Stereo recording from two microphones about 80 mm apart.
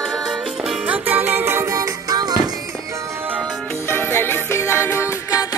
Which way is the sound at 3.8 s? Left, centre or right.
Left.